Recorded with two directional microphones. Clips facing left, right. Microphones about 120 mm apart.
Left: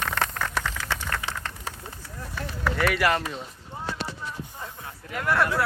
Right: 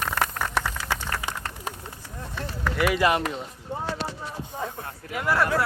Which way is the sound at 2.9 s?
20° right (ahead or behind).